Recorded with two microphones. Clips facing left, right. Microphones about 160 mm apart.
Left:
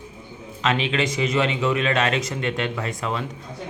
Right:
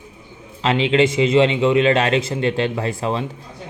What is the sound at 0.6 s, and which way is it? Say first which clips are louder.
A man's voice: right 6 dB; 30° right (ahead or behind).